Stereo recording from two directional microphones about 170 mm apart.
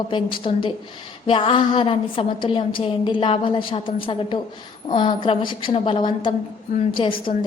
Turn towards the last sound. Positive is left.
turn(degrees=30)  # may be behind; listen again after turning